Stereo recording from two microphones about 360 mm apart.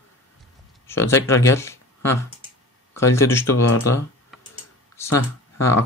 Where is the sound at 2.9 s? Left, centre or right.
Centre.